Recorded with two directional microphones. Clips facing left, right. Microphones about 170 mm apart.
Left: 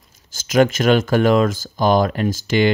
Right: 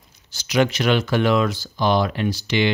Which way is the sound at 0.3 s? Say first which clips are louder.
Left 4 dB; 45° left (ahead or behind).